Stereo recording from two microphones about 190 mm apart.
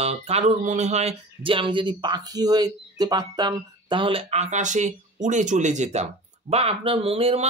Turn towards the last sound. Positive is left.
turn(degrees=-30)  # may be behind; listen again after turning